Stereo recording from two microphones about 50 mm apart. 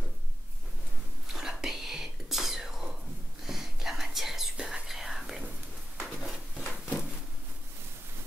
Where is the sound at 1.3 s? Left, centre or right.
Centre.